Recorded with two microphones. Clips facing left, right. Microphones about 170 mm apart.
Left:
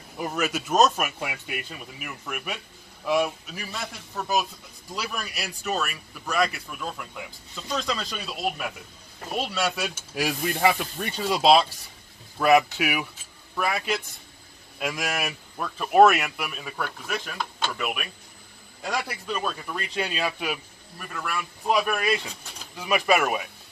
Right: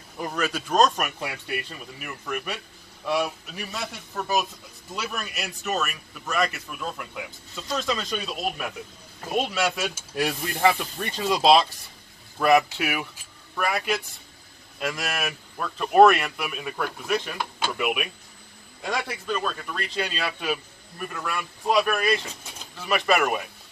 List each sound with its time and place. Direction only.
0.2 s speech: 5° left (ahead or behind)
9.8 s speech: 5° left (ahead or behind)
14.8 s speech: 15° left (ahead or behind)
21.0 s speech: centre (ahead or behind)